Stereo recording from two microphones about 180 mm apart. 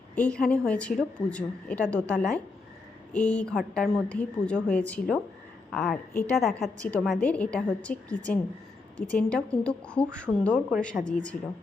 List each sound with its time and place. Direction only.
0.2 s a woman's voice: 5° left (ahead or behind)